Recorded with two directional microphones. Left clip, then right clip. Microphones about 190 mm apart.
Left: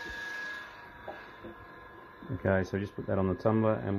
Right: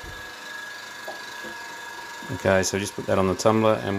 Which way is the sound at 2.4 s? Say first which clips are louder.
Right 9 dB; 20° right (ahead or behind).